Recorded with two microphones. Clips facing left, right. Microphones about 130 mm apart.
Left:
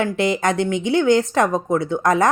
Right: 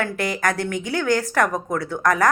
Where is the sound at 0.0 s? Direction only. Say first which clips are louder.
Left 4 dB; 25° left (ahead or behind).